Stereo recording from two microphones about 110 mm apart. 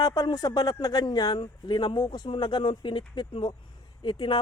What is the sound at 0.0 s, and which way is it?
Speech, 35° left (ahead or behind).